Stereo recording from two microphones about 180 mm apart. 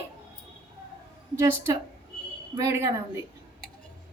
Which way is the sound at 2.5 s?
15° right (ahead or behind).